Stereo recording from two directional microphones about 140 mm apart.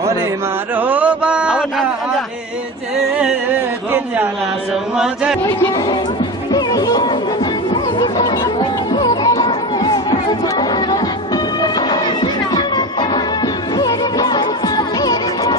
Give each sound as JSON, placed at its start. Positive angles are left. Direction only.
{"t": 0.7, "sound": "a sound", "side_deg": -10}
{"t": 4.9, "sound": "chant", "side_deg": -5}
{"t": 6.5, "sound": "music", "side_deg": 30}
{"t": 10.6, "sound": "chatter", "side_deg": 30}
{"t": 11.9, "sound": "music", "side_deg": 30}